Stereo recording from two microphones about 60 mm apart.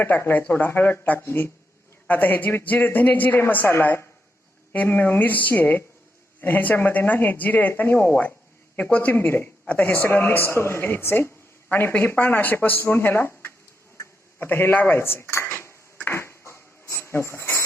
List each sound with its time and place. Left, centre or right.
0.2 s speech: left
2.0 s speech: left
9.1 s speech: left
14.3 s cutlery: left